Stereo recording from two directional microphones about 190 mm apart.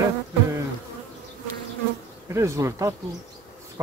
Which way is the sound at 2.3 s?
15° right (ahead or behind).